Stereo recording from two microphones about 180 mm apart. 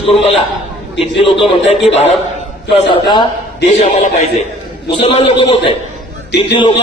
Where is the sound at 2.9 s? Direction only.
25° left (ahead or behind).